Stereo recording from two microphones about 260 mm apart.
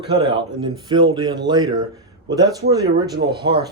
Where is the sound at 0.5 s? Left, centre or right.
Centre.